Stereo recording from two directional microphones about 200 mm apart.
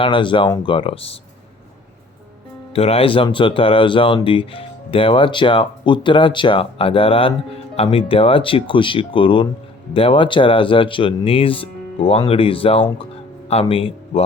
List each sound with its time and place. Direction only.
0.0 s speech: 25° left (ahead or behind)
2.7 s speech: 30° left (ahead or behind)